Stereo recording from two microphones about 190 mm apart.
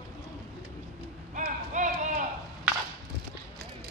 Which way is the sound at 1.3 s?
40° right (ahead or behind).